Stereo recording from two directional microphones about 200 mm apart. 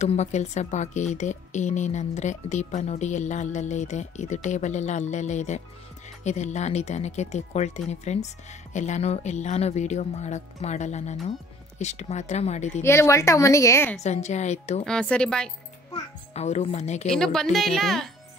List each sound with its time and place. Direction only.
0.0 s speech: 35° left (ahead or behind)
12.8 s a woman's voice: 15° left (ahead or behind)
14.0 s speech: 35° left (ahead or behind)
14.9 s speech: 5° left (ahead or behind)
16.3 s speech: 35° left (ahead or behind)
17.1 s speech: 5° left (ahead or behind)